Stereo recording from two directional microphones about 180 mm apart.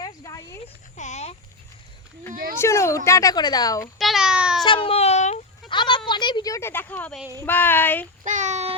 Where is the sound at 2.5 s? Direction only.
15° left (ahead or behind).